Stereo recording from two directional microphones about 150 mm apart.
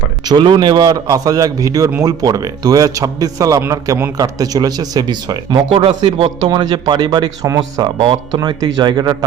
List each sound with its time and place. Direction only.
0.3 s a man's voice: 30° right (ahead or behind)
7.4 s a man's voice: 20° right (ahead or behind)
7.9 s a man's voice: 30° right (ahead or behind)